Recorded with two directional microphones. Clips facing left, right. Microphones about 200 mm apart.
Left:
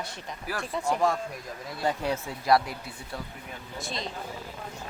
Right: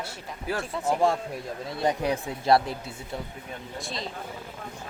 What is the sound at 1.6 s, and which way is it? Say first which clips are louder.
Speech: right 2 dB; 20° right (ahead or behind).